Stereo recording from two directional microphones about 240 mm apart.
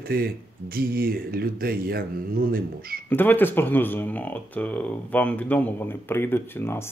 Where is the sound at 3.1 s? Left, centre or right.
Centre.